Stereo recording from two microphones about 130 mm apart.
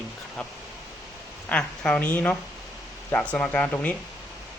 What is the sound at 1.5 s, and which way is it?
Speech, 5° left (ahead or behind).